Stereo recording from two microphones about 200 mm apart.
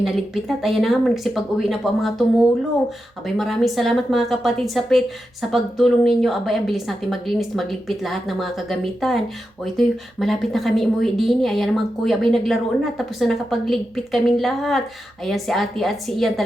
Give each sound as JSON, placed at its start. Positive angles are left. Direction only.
{"t": 0.0, "sound": "a woman's voice", "side_deg": 0}
{"t": 3.2, "sound": "a woman's voice", "side_deg": 0}